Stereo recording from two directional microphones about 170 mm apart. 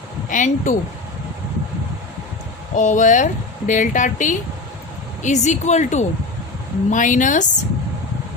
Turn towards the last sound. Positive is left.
turn(degrees=50)  # may be behind; listen again after turning